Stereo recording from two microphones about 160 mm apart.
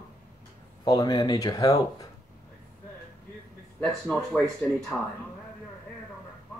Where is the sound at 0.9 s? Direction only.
25° left (ahead or behind).